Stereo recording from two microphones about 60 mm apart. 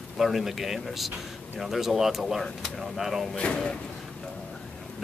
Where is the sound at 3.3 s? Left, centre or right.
Centre.